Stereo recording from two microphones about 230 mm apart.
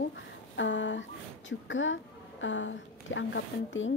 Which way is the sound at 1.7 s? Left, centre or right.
Left.